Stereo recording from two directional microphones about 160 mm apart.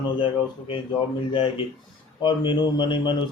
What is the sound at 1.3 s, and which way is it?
Speech, 30° left (ahead or behind).